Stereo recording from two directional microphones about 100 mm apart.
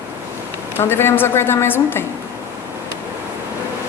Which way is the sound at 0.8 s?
25° left (ahead or behind).